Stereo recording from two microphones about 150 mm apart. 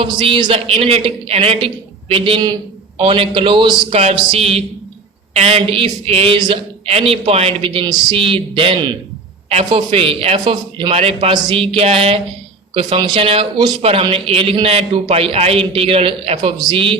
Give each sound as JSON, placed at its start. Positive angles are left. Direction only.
{"t": 0.0, "sound": "a man's voice", "side_deg": -35}
{"t": 3.8, "sound": "a man's voice", "side_deg": -50}